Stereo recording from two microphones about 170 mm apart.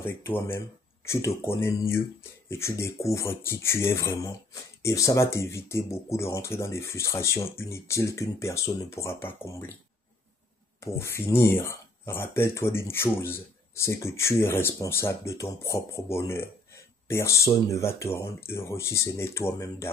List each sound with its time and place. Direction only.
0.0 s speech: 15° left (ahead or behind)
10.8 s speech: 15° left (ahead or behind)